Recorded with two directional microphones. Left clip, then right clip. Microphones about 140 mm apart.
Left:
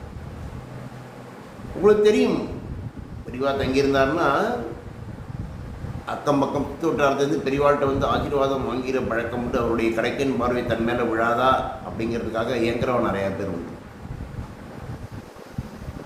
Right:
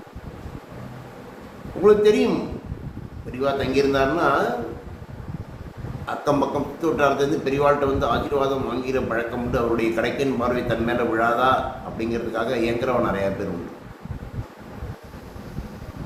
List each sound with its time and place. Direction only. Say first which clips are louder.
1.8 s a man's voice: right 1 dB; 5° right (ahead or behind)
3.3 s a man's voice: right 1 dB; 5° right (ahead or behind)
6.1 s a man's voice: even; 5° right (ahead or behind)